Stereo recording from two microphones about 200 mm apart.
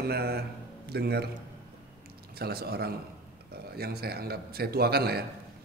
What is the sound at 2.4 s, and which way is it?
A man's voice, 50° right (ahead or behind).